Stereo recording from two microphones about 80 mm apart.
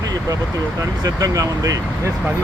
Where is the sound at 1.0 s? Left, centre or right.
Right.